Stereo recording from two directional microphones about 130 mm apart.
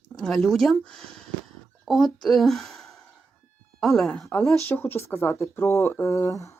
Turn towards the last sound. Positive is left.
turn(degrees=25)  # may be behind; listen again after turning